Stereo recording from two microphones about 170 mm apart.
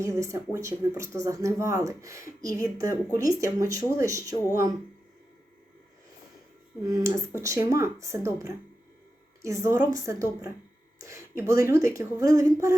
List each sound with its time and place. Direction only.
0.0 s speech: 20° right (ahead or behind)
6.8 s speech: 20° right (ahead or behind)